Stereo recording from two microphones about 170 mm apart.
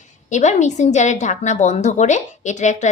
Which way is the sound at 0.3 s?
45° left (ahead or behind).